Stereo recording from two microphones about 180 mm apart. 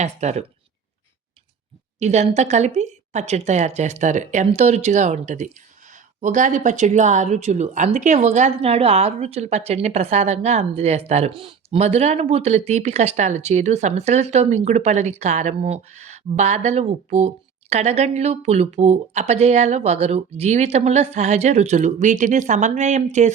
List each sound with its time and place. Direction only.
0.0 s speech: 40° right (ahead or behind)
2.0 s speech: 40° right (ahead or behind)